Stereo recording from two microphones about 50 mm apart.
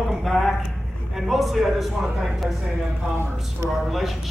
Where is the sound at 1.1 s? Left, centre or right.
Centre.